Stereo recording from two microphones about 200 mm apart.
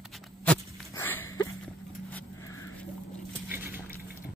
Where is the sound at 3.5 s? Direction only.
10° right (ahead or behind).